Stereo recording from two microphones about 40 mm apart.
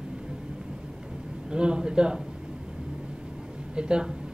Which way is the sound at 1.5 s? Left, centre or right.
Right.